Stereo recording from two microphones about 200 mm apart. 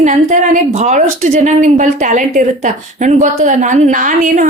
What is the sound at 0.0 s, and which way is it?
A woman's voice, 35° right (ahead or behind).